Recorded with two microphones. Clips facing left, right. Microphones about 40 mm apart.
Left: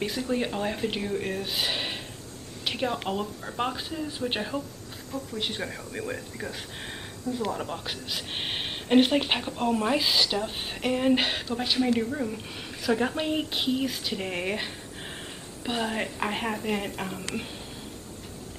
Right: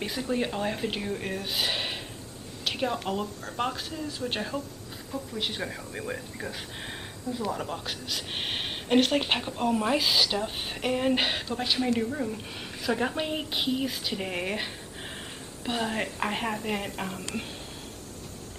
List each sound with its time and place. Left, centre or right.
0.0 s speech: centre
2.6 s a sound: centre
3.1 s speech: centre
7.5 s speech: centre